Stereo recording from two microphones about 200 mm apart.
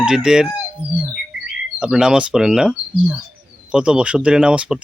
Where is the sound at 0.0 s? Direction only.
5° right (ahead or behind).